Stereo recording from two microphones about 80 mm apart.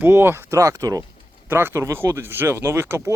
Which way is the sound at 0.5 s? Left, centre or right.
Right.